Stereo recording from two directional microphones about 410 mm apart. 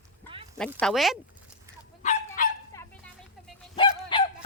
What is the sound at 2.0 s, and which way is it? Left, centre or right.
Dog, centre.